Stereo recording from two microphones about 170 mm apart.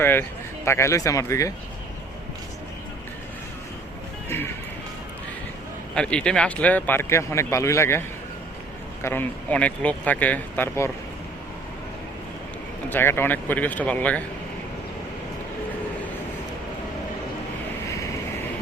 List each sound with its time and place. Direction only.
0.0 s speech: 10° left (ahead or behind)
5.9 s speech: 5° left (ahead or behind)
9.0 s speech: 10° left (ahead or behind)
12.9 s speech: 15° left (ahead or behind)